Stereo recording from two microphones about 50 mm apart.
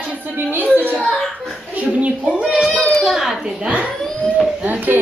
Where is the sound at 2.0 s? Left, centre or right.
Right.